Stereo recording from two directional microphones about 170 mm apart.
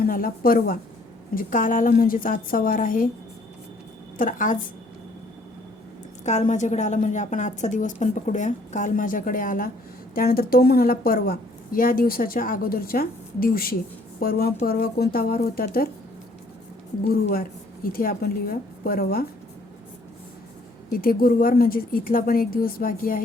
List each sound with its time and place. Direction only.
0.0 s a woman's voice: 55° left (ahead or behind)
4.2 s a woman's voice: 50° left (ahead or behind)
6.2 s a woman's voice: 45° left (ahead or behind); by 15.9 s 60° left (ahead or behind)
17.1 s a woman's voice: 65° left (ahead or behind)
21.0 s a woman's voice: 55° left (ahead or behind)